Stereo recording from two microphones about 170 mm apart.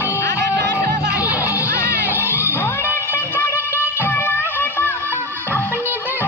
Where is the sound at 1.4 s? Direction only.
15° left (ahead or behind).